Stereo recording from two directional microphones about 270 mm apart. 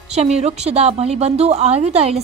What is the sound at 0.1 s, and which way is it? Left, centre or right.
A woman's voice, right.